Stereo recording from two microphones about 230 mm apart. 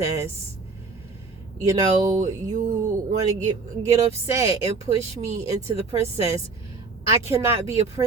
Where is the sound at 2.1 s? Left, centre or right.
Right.